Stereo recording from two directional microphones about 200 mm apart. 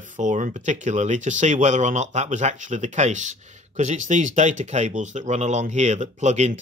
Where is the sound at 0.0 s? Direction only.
40° right (ahead or behind).